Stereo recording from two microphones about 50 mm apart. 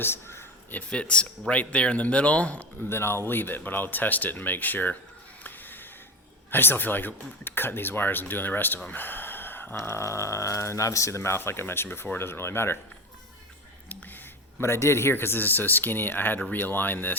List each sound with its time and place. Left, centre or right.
0.0 s a sound: left
0.7 s speech: left
2.9 s a man's voice: left
3.2 s speech: left
5.4 s a sound: left
6.5 s speech: left
8.9 s a sound: left
9.7 s speech: left
14.6 s a man's voice: left
15.1 s speech: left